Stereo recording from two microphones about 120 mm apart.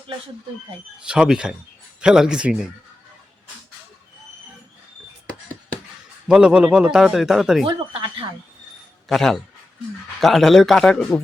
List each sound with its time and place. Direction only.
0.9 s a man's voice: 5° right (ahead or behind)
6.2 s a man's voice: 5° right (ahead or behind)
9.0 s a man's voice: centre (ahead or behind)